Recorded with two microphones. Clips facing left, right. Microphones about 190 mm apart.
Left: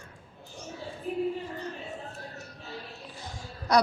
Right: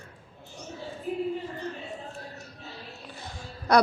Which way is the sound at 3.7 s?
60° right (ahead or behind).